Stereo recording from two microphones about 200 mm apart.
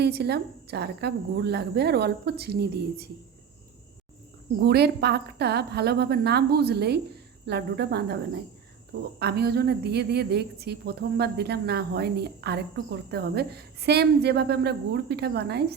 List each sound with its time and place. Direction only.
0.0 s a woman's voice: 55° right (ahead or behind)
4.6 s a woman's voice: 55° right (ahead or behind)